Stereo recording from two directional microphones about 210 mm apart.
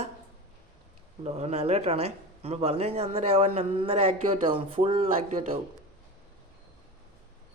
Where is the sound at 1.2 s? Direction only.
30° right (ahead or behind).